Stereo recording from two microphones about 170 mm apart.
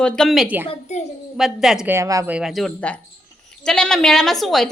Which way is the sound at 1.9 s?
20° right (ahead or behind).